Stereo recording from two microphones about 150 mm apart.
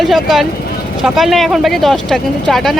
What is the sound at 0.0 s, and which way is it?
Speech, centre (ahead or behind).